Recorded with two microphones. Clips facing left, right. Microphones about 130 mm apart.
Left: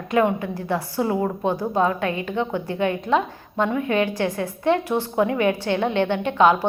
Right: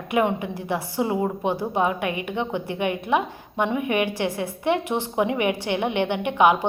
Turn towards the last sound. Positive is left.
turn(degrees=-15)  # may be behind; listen again after turning